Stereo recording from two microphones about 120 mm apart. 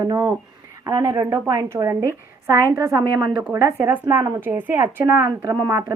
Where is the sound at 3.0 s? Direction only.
40° right (ahead or behind).